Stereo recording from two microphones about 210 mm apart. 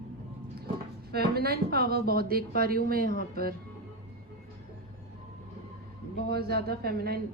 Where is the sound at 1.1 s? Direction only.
50° right (ahead or behind).